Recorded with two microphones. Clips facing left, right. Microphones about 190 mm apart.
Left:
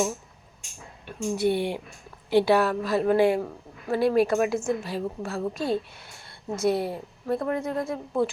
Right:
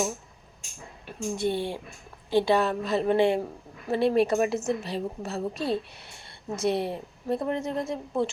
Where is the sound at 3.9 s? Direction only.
30° right (ahead or behind).